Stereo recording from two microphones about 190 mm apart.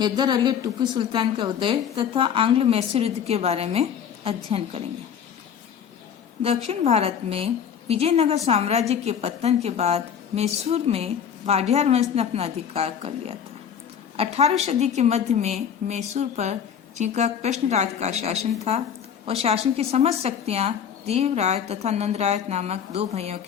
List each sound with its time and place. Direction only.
0.0 s a woman's voice: 20° right (ahead or behind)
6.4 s speech: 30° right (ahead or behind)